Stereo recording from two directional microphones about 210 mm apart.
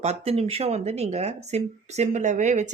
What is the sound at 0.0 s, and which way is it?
Speech, 30° right (ahead or behind).